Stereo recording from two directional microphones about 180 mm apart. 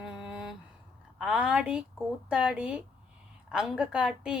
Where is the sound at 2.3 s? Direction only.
5° right (ahead or behind).